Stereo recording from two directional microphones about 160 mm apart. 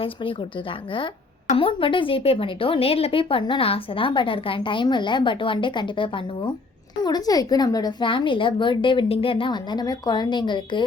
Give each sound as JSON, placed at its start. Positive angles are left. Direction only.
{"t": 1.5, "sound": "a woman's voice", "side_deg": 35}